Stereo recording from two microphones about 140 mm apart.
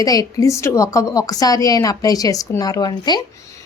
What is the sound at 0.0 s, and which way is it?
A woman's voice, 25° left (ahead or behind).